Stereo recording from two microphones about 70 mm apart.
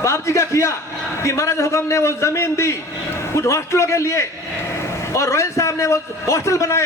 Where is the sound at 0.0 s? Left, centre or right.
Left.